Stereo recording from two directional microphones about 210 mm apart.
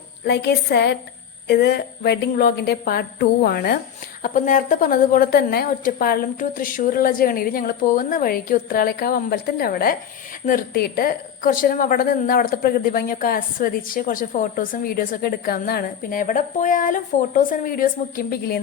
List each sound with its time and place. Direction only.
0.3 s a woman's voice: 55° left (ahead or behind)